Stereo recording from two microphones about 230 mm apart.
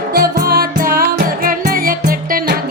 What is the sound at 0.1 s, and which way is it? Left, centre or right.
Music, right.